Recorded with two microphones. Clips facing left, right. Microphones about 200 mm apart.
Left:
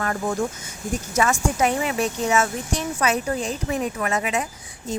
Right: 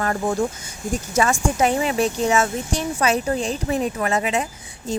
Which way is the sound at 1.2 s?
30° right (ahead or behind).